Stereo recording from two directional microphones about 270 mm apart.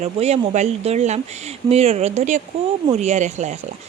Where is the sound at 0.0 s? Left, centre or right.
Right.